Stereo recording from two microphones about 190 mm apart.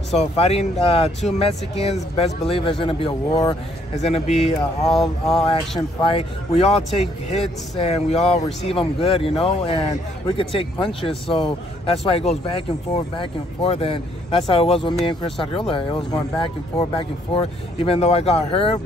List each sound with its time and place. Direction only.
0.1 s speech: 35° left (ahead or behind)
3.9 s speech: 35° left (ahead or behind)
4.6 s speech: centre (ahead or behind)
5.4 s speech: 25° left (ahead or behind)